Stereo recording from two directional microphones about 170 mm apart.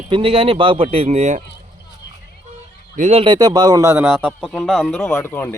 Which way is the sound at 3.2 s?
25° right (ahead or behind).